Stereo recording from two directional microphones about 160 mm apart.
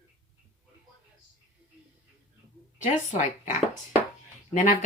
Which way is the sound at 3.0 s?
45° left (ahead or behind).